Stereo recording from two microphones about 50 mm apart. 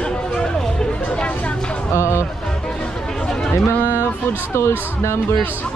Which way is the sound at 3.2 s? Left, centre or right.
Centre.